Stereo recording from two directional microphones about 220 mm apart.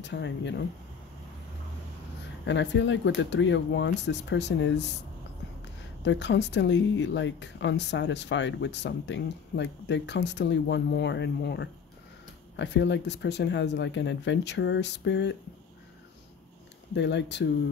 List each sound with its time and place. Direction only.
0.0 s speech: 55° left (ahead or behind)
2.4 s speech: 55° left (ahead or behind)
6.0 s speech: 55° left (ahead or behind)
16.9 s speech: 55° left (ahead or behind)